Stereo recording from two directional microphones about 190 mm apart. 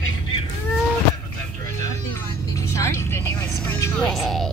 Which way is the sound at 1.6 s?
15° left (ahead or behind).